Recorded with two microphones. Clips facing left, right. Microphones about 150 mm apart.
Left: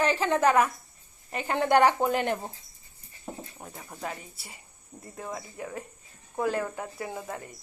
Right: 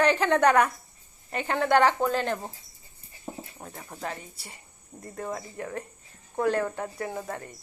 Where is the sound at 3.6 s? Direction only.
Centre (ahead or behind).